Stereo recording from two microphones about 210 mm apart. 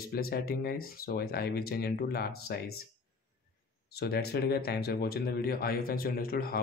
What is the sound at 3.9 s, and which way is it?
Speech, 50° left (ahead or behind).